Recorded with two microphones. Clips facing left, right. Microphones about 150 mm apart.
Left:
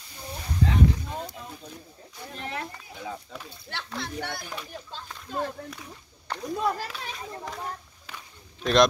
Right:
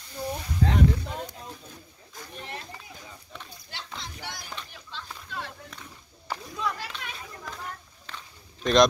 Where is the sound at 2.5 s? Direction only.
85° left.